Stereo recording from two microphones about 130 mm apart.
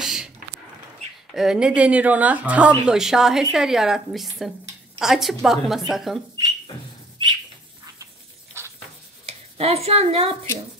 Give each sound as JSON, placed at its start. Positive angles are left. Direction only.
{"t": 0.0, "sound": "a sound", "side_deg": -5}
{"t": 1.3, "sound": "a woman's voice", "side_deg": -5}
{"t": 9.6, "sound": "a woman's voice", "side_deg": -50}